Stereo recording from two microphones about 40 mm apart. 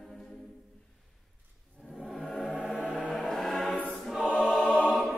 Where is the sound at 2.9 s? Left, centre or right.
Left.